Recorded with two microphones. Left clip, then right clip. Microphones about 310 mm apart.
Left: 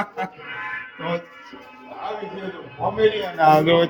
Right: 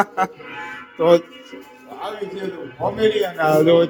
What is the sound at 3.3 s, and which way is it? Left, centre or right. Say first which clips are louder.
Speech: even; centre.